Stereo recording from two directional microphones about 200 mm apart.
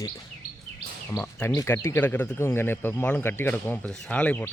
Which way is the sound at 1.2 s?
10° left (ahead or behind).